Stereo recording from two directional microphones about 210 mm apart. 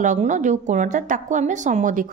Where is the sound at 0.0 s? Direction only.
35° right (ahead or behind).